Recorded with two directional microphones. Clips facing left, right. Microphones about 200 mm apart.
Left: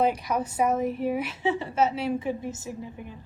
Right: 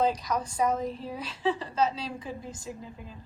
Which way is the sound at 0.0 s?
25° left (ahead or behind).